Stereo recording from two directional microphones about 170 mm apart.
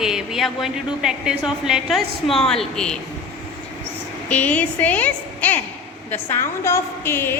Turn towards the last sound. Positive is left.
turn(degrees=15)  # may be behind; listen again after turning